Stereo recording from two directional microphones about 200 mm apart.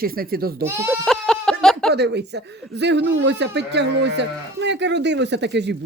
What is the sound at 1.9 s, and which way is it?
Speech, 60° right (ahead or behind).